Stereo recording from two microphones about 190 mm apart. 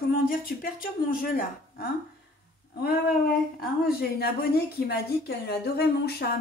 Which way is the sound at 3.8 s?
55° left (ahead or behind).